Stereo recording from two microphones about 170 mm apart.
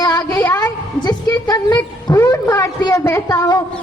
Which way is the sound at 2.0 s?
25° left (ahead or behind).